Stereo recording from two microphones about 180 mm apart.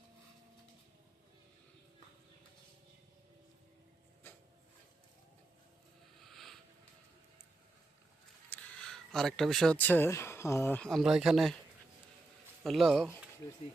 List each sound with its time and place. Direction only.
6.2 s a sound: centre (ahead or behind)
8.4 s speech: 5° left (ahead or behind)
12.6 s speech: centre (ahead or behind)
13.4 s speech: 20° left (ahead or behind)